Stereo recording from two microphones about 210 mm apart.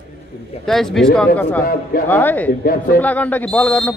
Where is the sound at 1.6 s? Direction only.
45° left (ahead or behind).